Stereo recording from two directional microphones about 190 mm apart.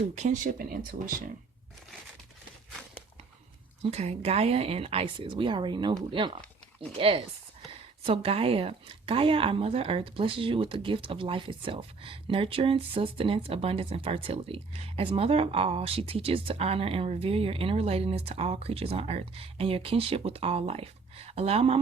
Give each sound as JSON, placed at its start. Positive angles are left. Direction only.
{"t": 0.0, "sound": "speech", "side_deg": -40}
{"t": 3.8, "sound": "speech", "side_deg": -35}
{"t": 7.7, "sound": "speech", "side_deg": -30}